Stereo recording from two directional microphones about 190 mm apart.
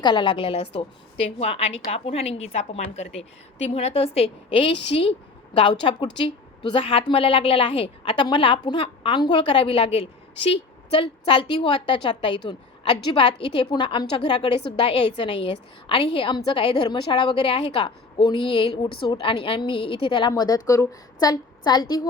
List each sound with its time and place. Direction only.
0.0 s a woman's voice: 25° left (ahead or behind)